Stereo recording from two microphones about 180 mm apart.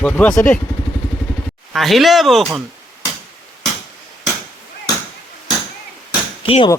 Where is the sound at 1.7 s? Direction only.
Centre (ahead or behind).